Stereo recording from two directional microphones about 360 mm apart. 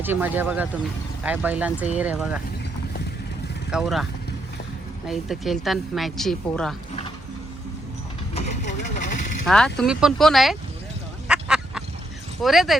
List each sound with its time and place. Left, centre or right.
0.0 s speech: centre
3.7 s speech: centre
5.0 s speech: centre
8.4 s vehicle: centre
9.5 s speech: centre
11.3 s duck: centre
12.4 s speech: centre